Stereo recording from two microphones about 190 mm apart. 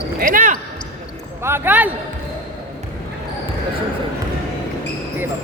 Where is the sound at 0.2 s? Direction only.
45° right (ahead or behind).